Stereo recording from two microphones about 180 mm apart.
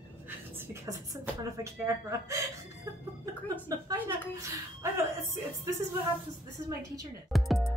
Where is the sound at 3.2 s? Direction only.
20° right (ahead or behind).